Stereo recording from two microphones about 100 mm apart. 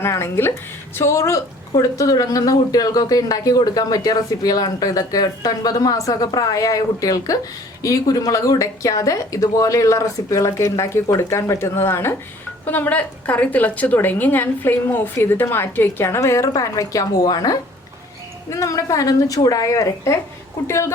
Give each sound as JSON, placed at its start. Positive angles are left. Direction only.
{"t": 0.0, "sound": "a woman's voice", "side_deg": 25}